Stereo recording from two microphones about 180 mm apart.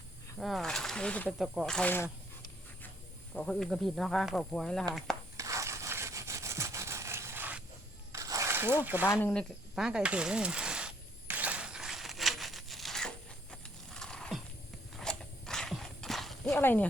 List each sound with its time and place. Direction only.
0.3 s speech: centre (ahead or behind)
3.3 s speech: 5° left (ahead or behind)
5.4 s wood: 15° right (ahead or behind)
8.1 s a sound: 15° right (ahead or behind)
9.2 s snake: 5° left (ahead or behind)
14.9 s horse: 5° left (ahead or behind)
16.6 s speech: 10° left (ahead or behind)